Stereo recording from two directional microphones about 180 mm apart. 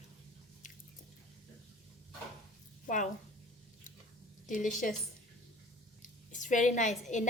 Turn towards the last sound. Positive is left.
turn(degrees=40)  # may be behind; listen again after turning